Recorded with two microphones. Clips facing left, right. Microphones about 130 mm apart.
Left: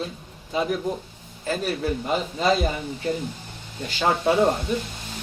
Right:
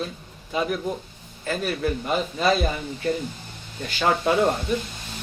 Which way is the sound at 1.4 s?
30° left (ahead or behind).